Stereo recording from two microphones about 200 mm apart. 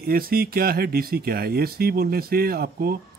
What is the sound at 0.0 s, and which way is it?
Speech, 50° right (ahead or behind).